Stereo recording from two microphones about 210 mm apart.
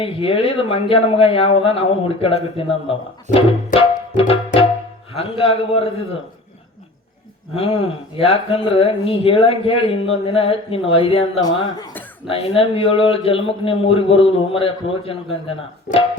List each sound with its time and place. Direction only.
0.0 s speech: 25° left (ahead or behind)
3.7 s music: 40° left (ahead or behind)
4.2 s speech: 25° left (ahead or behind)
7.5 s speech: 25° left (ahead or behind)